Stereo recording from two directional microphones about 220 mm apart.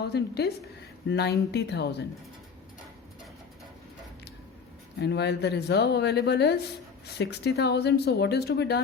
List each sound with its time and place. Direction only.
0.0 s speech: 45° left (ahead or behind)
4.9 s speech: 50° left (ahead or behind)